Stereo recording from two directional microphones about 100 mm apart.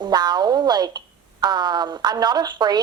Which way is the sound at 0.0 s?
45° right (ahead or behind).